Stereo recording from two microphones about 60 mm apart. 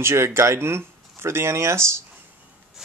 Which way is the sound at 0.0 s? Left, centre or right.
Right.